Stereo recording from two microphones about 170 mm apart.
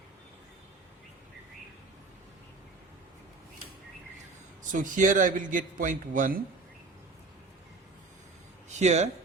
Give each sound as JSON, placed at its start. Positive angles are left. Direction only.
{"t": 4.7, "sound": "a man's voice", "side_deg": -50}
{"t": 8.8, "sound": "speech", "side_deg": -40}